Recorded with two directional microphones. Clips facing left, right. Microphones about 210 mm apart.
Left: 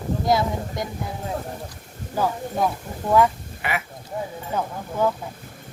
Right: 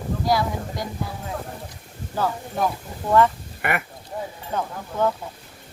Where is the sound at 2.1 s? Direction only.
15° left (ahead or behind).